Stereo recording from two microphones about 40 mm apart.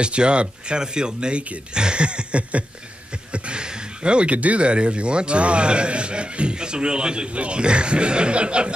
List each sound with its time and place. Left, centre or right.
0.0 s speech: right